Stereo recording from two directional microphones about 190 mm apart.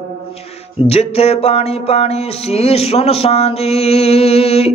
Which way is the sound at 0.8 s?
30° left (ahead or behind).